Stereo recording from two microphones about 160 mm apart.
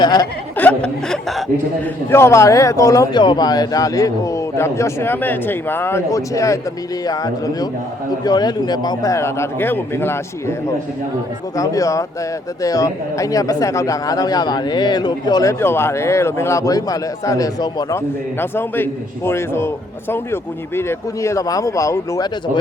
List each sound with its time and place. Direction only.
0.0 s speech: 25° left (ahead or behind)
0.5 s speech: 10° left (ahead or behind)
2.0 s speech: 15° left (ahead or behind)
11.5 s a man's voice: 20° left (ahead or behind)